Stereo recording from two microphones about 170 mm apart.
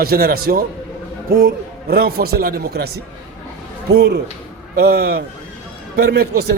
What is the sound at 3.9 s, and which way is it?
A man's voice, 70° right (ahead or behind).